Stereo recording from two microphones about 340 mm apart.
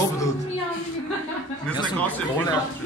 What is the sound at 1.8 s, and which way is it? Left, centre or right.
Speech, centre.